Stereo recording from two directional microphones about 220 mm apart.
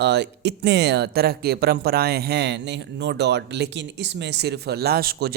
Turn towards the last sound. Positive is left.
turn(degrees=-45)  # may be behind; listen again after turning